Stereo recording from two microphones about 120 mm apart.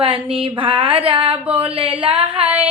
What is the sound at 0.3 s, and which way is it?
Female singing, 45° right (ahead or behind).